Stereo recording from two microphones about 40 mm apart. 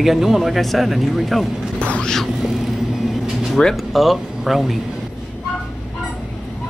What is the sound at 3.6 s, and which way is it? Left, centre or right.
Speech, left.